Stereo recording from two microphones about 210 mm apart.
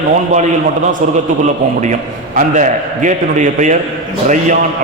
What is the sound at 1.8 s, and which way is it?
A man's voice, 35° right (ahead or behind).